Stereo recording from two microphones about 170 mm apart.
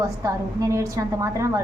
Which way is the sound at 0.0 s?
20° right (ahead or behind).